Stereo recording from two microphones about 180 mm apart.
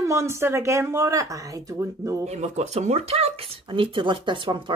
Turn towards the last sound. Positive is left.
turn(degrees=-25)  # may be behind; listen again after turning